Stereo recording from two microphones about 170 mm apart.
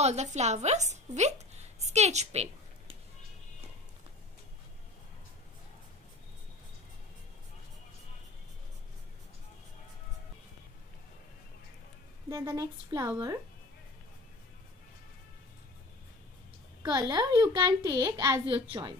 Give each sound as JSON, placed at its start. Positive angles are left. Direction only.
{"t": 0.0, "sound": "a woman's voice", "side_deg": -40}
{"t": 12.3, "sound": "a child's voice", "side_deg": -20}
{"t": 16.8, "sound": "a child's voice", "side_deg": -25}